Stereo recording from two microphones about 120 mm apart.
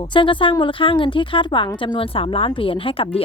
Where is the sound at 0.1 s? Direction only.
45° left (ahead or behind).